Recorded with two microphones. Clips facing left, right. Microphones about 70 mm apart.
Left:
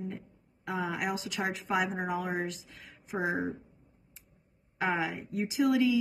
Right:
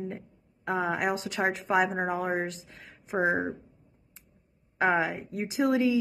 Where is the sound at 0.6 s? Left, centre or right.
Right.